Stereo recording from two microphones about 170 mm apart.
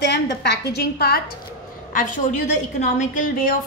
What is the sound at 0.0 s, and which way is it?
A woman's voice, 80° left.